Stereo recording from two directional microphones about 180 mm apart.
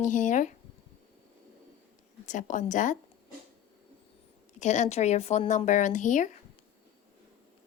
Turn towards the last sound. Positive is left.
turn(degrees=45)  # may be behind; listen again after turning